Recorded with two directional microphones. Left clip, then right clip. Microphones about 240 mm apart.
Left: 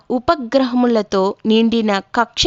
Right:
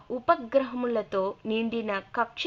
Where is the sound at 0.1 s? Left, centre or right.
Left.